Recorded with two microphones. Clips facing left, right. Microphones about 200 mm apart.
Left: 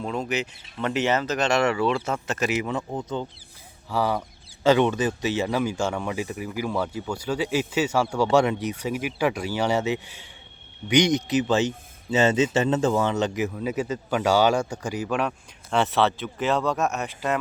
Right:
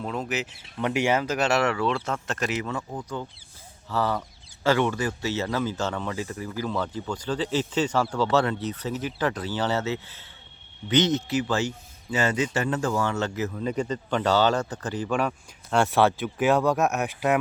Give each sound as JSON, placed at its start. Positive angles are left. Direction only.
{"t": 0.0, "sound": "speech", "side_deg": 0}
{"t": 3.8, "sound": "speech", "side_deg": 10}
{"t": 13.5, "sound": "speech", "side_deg": 5}
{"t": 15.2, "sound": "speech", "side_deg": -5}